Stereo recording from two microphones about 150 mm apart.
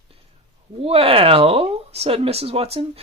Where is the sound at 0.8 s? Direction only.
40° right (ahead or behind).